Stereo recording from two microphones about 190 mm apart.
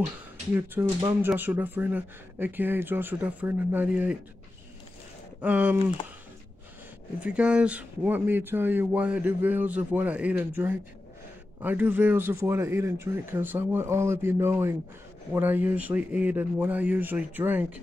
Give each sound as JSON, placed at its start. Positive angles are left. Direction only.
{"t": 0.6, "sound": "speech", "side_deg": -15}
{"t": 5.4, "sound": "speech", "side_deg": -5}
{"t": 7.2, "sound": "speech", "side_deg": -5}